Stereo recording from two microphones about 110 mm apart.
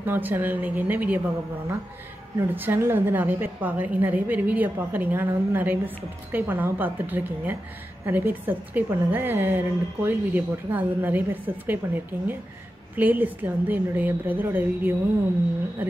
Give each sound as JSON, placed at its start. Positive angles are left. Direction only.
{"t": 0.0, "sound": "a woman's voice", "side_deg": -20}
{"t": 2.5, "sound": "a woman's voice", "side_deg": -20}